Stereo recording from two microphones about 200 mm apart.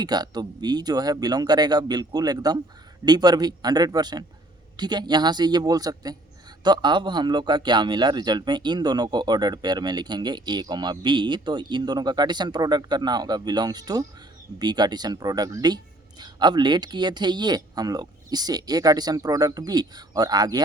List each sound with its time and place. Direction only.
0.0 s a man's voice: 20° right (ahead or behind)